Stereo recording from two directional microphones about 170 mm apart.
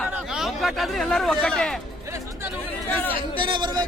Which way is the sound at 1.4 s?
5° left (ahead or behind).